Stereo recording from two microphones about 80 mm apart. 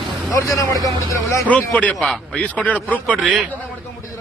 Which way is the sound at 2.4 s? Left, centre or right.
Centre.